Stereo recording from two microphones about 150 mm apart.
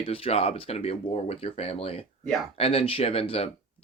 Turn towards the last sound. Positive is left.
turn(degrees=40)  # may be behind; listen again after turning